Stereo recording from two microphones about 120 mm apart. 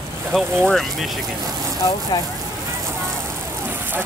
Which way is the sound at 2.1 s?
35° left (ahead or behind).